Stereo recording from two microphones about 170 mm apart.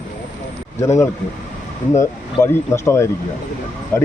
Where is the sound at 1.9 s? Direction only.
15° left (ahead or behind).